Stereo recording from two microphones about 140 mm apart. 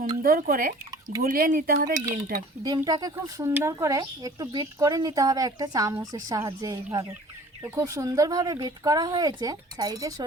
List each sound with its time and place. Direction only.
0.2 s speech: 90° right
2.6 s speech: 25° right (ahead or behind)